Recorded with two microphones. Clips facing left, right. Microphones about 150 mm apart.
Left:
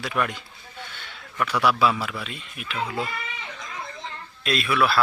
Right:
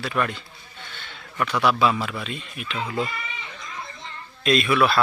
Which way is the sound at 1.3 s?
10° left (ahead or behind).